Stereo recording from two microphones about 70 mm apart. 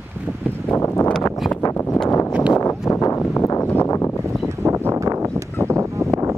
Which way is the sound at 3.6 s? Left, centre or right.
Left.